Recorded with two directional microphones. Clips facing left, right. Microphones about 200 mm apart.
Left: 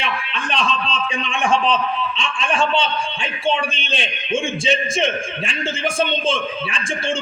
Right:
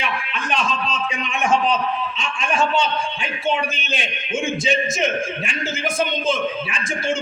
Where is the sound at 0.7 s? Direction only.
30° left (ahead or behind).